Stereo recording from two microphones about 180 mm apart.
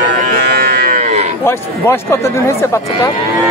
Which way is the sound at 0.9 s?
40° right (ahead or behind).